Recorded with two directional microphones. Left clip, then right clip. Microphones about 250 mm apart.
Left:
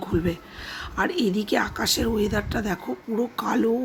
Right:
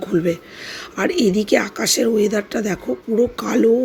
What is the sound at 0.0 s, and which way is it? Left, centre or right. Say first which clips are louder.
Speech: right 7 dB; centre.